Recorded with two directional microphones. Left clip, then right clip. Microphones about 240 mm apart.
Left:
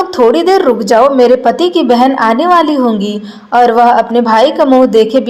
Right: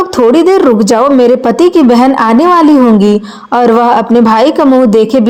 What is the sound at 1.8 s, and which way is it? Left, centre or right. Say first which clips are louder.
Speech: right 2 dB; right.